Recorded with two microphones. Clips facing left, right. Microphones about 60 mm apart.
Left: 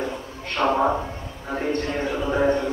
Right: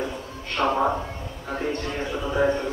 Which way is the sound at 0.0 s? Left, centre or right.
Centre.